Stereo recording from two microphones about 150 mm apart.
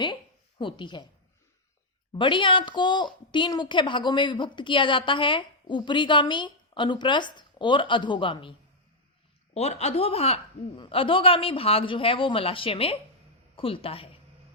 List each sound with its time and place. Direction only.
0.6 s a woman's voice: 30° left (ahead or behind)
2.1 s a woman's voice: 35° left (ahead or behind)
9.6 s a woman's voice: 45° left (ahead or behind)